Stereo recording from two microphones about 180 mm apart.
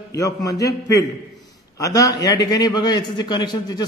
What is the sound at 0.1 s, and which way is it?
A man's voice, 20° left (ahead or behind).